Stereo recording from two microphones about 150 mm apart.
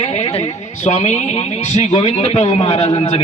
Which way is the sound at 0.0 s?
45° left (ahead or behind).